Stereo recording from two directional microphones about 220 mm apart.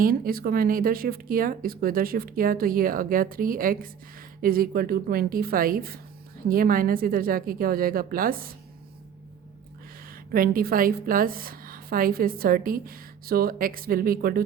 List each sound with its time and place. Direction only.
0.0 s a woman's voice: 40° right (ahead or behind)
10.1 s a woman's voice: 40° right (ahead or behind)